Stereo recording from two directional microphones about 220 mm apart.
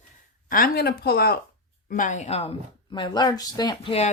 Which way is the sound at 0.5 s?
45° left (ahead or behind).